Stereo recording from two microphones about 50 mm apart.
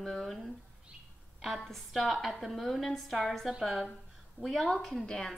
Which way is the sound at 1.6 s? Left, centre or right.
Centre.